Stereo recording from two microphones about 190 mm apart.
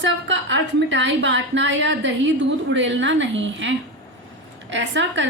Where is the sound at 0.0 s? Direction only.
75° right (ahead or behind).